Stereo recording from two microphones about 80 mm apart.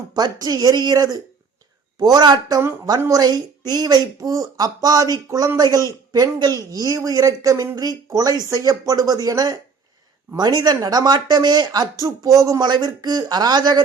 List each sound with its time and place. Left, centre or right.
0.1 s speech: right
4.3 s speech: right